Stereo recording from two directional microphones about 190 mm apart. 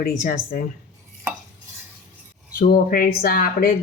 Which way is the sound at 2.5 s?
50° left (ahead or behind).